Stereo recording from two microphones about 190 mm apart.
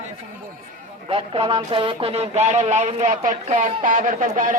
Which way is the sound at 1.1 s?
30° right (ahead or behind).